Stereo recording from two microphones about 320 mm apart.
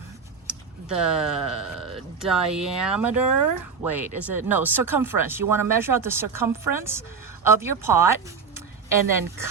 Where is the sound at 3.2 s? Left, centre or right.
Right.